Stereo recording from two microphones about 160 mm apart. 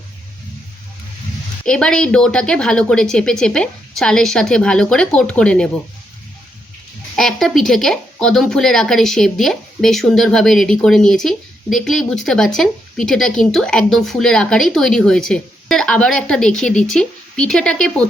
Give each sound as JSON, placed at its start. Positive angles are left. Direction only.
{"t": 1.6, "sound": "speech", "side_deg": 5}
{"t": 7.2, "sound": "speech", "side_deg": 5}